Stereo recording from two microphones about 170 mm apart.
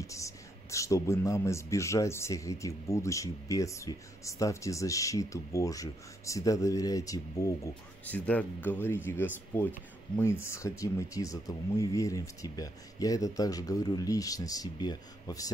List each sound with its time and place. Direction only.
0.0 s speech: 20° left (ahead or behind)